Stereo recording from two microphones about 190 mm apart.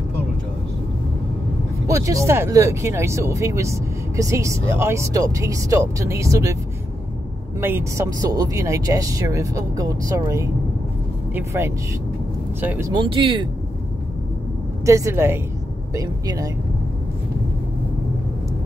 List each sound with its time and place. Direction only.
1.9 s speech: 15° right (ahead or behind)
7.6 s speech: 15° right (ahead or behind)
12.9 s speech: 25° right (ahead or behind)
14.9 s speech: 15° right (ahead or behind)